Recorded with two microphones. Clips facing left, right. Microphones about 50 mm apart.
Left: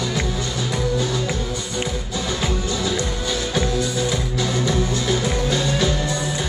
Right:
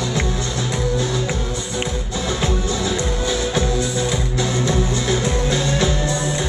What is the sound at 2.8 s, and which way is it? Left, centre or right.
Music, centre.